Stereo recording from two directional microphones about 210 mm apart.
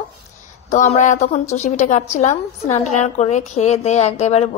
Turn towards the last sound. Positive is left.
turn(degrees=30)  # may be behind; listen again after turning